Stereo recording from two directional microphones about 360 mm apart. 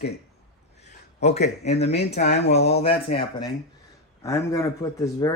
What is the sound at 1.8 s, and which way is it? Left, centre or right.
Speech, left.